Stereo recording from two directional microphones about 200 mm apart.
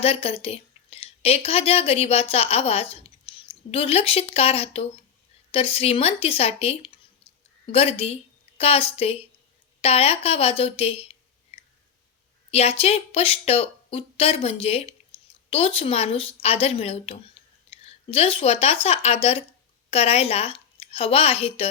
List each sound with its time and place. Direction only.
0.0 s a woman's voice: 30° left (ahead or behind)